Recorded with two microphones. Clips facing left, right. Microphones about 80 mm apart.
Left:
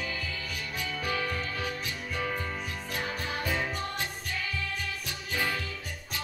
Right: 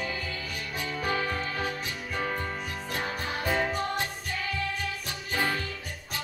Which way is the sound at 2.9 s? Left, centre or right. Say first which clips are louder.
Right 2 dB; right.